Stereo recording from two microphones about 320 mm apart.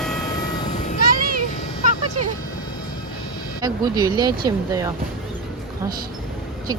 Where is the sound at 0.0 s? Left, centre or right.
Centre.